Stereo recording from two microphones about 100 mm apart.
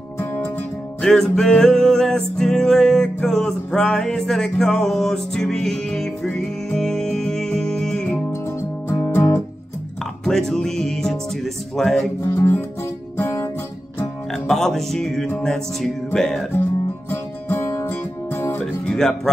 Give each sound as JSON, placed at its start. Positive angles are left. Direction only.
{"t": 0.2, "sound": "music", "side_deg": 25}
{"t": 1.0, "sound": "music", "side_deg": 5}
{"t": 8.3, "sound": "music", "side_deg": 25}
{"t": 10.2, "sound": "music", "side_deg": 5}
{"t": 12.2, "sound": "music", "side_deg": 25}
{"t": 14.3, "sound": "music", "side_deg": 5}
{"t": 17.1, "sound": "music", "side_deg": 25}
{"t": 18.9, "sound": "speech", "side_deg": 5}